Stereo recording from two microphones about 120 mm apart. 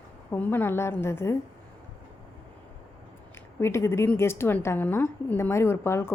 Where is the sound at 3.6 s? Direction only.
20° left (ahead or behind).